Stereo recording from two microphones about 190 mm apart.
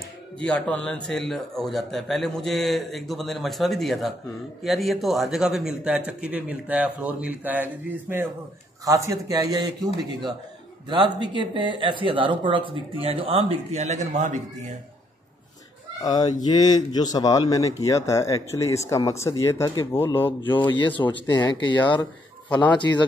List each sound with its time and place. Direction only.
0.4 s a man's voice: 5° left (ahead or behind); by 14.7 s 40° right (ahead or behind)
16.0 s speech: 20° left (ahead or behind)
20.5 s speech: 25° left (ahead or behind)
22.6 s speech: 25° left (ahead or behind)